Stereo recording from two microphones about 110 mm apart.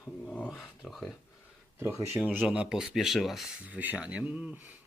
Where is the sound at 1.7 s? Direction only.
20° right (ahead or behind).